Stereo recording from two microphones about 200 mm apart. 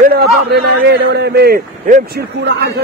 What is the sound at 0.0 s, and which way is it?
A man's voice, 50° right (ahead or behind).